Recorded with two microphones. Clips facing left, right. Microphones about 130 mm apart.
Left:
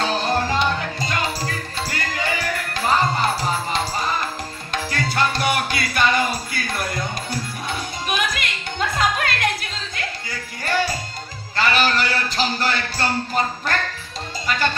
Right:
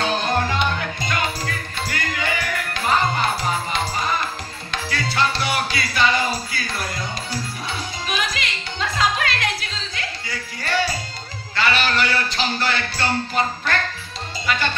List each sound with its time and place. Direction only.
0.1 s music: 35° left (ahead or behind)
4.8 s music: 45° left (ahead or behind)
8.1 s music: 50° left (ahead or behind)
11.5 s a sound: 40° left (ahead or behind)